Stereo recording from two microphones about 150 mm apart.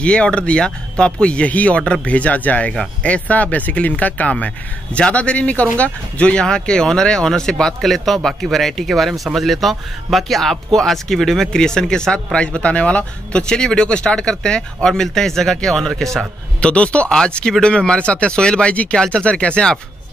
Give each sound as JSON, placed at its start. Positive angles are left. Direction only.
{"t": 0.0, "sound": "speech", "side_deg": 5}